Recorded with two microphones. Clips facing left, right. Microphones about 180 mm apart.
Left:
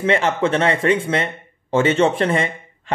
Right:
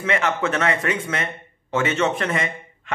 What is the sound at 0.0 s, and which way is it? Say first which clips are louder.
Speech: left 4 dB; 30° left (ahead or behind).